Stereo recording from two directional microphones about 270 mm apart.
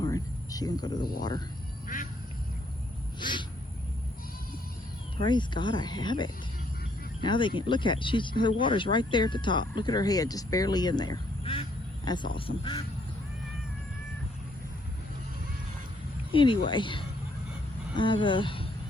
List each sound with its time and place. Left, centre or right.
0.0 s cricket: centre
1.2 s speech: centre
3.2 s owl: centre
5.1 s speech: centre
16.3 s speech: centre